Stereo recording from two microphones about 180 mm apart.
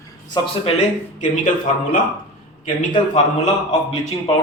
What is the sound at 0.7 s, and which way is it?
Speech, 45° left (ahead or behind).